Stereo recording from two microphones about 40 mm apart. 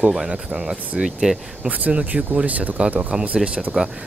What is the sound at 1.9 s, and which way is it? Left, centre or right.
Speech, right.